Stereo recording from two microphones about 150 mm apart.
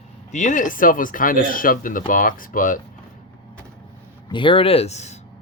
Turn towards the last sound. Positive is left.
turn(degrees=50)  # may be behind; listen again after turning